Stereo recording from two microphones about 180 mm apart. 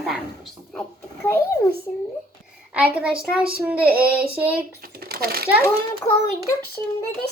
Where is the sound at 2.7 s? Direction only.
10° right (ahead or behind).